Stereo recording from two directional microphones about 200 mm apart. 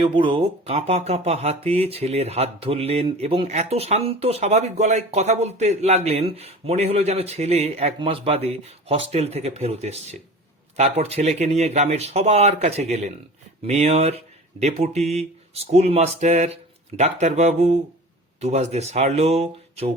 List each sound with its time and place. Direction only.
0.0 s speech: 25° right (ahead or behind)